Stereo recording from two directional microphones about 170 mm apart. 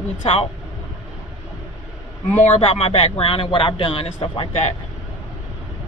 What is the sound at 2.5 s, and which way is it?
Speech, 35° left (ahead or behind).